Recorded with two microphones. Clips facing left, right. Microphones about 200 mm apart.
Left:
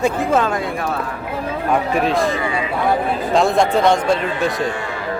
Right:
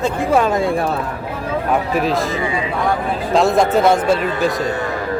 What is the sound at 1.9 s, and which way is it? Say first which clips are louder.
Speech: left 1 dB; centre (ahead or behind).